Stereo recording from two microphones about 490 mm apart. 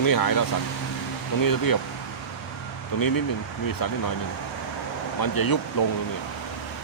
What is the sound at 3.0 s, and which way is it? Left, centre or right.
Speech, left.